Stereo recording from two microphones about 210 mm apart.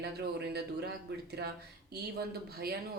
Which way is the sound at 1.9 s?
50° right (ahead or behind).